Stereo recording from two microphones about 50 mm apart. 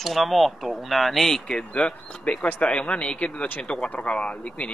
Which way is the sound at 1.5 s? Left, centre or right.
Centre.